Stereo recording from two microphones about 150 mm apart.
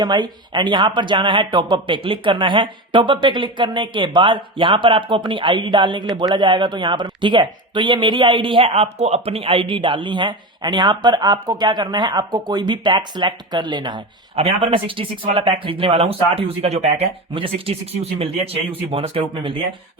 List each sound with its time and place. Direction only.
0.0 s speech: 30° right (ahead or behind)